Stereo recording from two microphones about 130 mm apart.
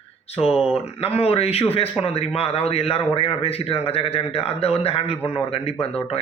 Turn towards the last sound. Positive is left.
turn(degrees=45)  # may be behind; listen again after turning